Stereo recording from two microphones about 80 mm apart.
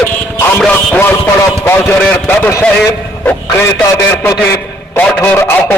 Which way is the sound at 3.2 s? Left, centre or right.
Left.